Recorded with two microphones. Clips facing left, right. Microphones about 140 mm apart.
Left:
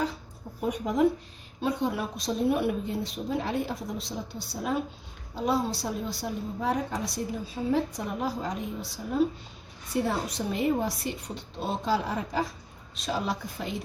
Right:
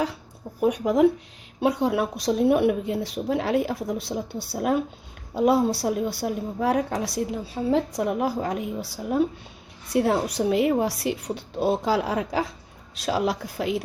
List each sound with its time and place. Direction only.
0.6 s a woman's voice: 75° right (ahead or behind)